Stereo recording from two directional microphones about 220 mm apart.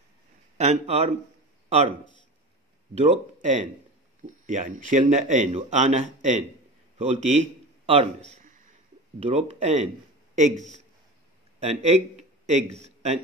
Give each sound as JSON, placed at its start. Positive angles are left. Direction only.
{"t": 0.6, "sound": "a man's voice", "side_deg": -30}
{"t": 8.3, "sound": "a sound", "side_deg": -35}
{"t": 9.2, "sound": "a man's voice", "side_deg": -30}